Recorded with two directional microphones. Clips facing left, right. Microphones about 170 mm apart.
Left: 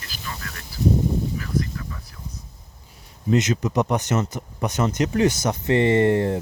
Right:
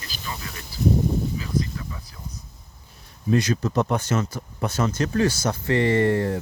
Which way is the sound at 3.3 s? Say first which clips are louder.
Left 1 dB; 20° left (ahead or behind).